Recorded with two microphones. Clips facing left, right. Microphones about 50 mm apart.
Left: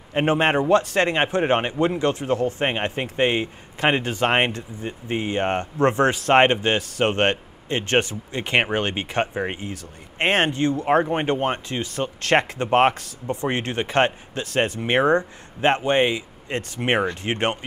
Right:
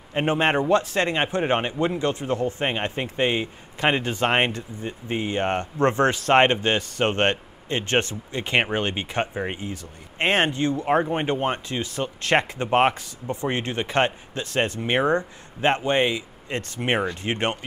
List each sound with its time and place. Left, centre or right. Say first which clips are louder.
0.1 s speech: left 2 dB; left
0.7 s speech: left 2 dB; left
2.6 s speech: left 2 dB; left
9.3 s speech: left 2 dB; centre
9.7 s speech: even; left